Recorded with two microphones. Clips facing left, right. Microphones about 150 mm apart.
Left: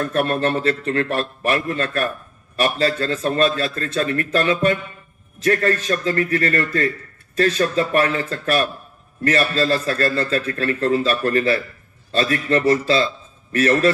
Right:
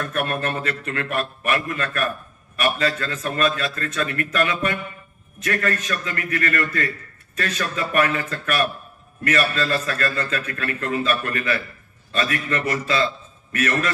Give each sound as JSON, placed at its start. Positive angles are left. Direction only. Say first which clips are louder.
{"t": 0.0, "sound": "a man's voice", "louder": "left 5 dB", "side_deg": 35}